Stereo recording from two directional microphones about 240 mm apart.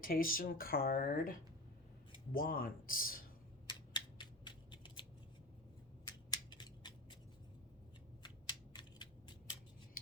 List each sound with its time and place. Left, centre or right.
0.0 s speech: left
3.7 s scissors: centre
6.1 s scissors: centre
8.2 s a sound: centre